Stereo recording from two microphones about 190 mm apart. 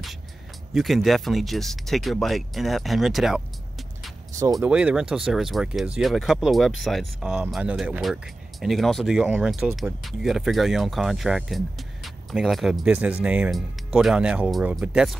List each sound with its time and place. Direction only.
0.7 s speech: centre (ahead or behind)
4.4 s speech: 20° right (ahead or behind)
4.6 s speech: 5° right (ahead or behind)